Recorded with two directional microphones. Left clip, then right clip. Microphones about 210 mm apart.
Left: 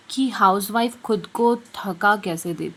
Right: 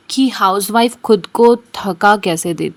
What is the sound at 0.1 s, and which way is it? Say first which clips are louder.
Speech: right 4 dB; 30° right (ahead or behind).